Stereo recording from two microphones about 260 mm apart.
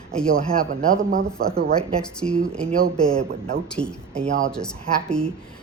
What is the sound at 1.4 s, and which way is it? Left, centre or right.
Speech, right.